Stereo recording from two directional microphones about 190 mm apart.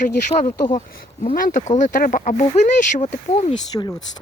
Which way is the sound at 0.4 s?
20° left (ahead or behind).